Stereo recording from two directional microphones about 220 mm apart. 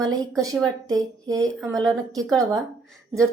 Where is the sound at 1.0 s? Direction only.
15° right (ahead or behind).